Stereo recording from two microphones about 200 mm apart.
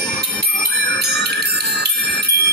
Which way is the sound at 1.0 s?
55° right (ahead or behind).